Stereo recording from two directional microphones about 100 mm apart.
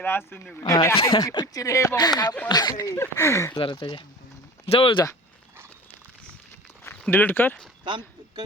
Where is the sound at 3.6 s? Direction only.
60° left (ahead or behind).